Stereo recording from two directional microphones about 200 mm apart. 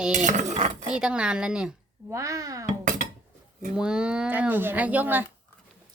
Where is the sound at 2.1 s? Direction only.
15° right (ahead or behind).